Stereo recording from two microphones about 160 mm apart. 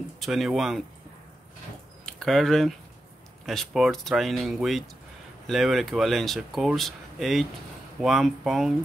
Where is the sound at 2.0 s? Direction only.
Centre (ahead or behind).